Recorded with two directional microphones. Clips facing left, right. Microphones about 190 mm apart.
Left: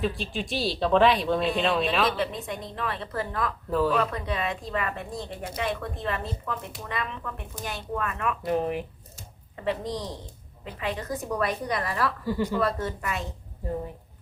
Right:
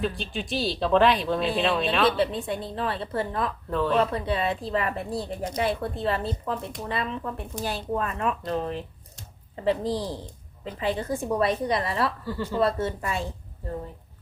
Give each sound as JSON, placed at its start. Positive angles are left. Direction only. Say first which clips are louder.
{"t": 0.0, "sound": "speech", "louder": "even", "side_deg": 0}
{"t": 2.0, "sound": "a woman's voice", "louder": "right 4 dB", "side_deg": -30}
{"t": 3.7, "sound": "speech", "louder": "left 2 dB", "side_deg": 5}
{"t": 3.9, "sound": "speech", "louder": "right 3 dB", "side_deg": -30}
{"t": 8.4, "sound": "speech", "louder": "left 2 dB", "side_deg": 15}
{"t": 9.6, "sound": "a woman's voice", "louder": "right 4 dB", "side_deg": -30}
{"t": 12.2, "sound": "speech", "louder": "left 4 dB", "side_deg": 15}
{"t": 12.5, "sound": "a woman's voice", "louder": "right 2 dB", "side_deg": -25}